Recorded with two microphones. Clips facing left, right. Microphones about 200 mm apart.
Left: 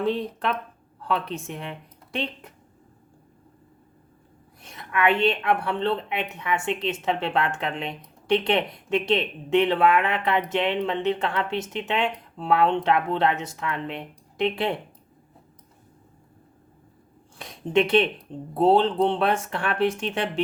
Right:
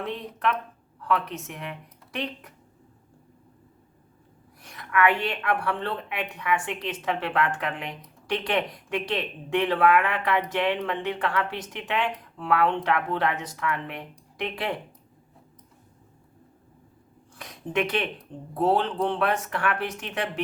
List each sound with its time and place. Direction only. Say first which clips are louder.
0.0 s a woman's voice: left 4 dB; 30° left (ahead or behind)
4.6 s a woman's voice: even; 25° left (ahead or behind)
17.3 s a woman's voice: left 6 dB; 25° left (ahead or behind)